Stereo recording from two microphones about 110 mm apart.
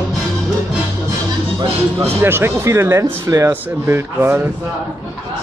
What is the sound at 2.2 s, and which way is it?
Speech, 20° right (ahead or behind).